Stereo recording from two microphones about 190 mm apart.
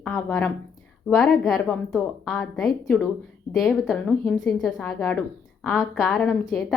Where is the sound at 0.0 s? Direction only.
10° left (ahead or behind).